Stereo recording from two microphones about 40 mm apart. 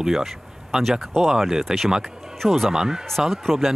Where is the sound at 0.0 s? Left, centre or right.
Centre.